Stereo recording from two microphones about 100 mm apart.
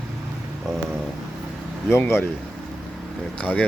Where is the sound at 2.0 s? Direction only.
25° left (ahead or behind).